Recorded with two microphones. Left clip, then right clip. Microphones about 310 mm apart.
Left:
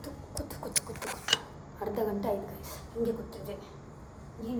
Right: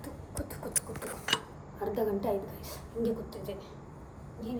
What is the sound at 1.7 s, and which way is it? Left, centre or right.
A woman's voice, centre.